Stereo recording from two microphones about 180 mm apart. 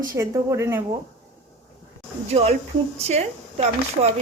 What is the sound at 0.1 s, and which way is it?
Speech, 15° right (ahead or behind).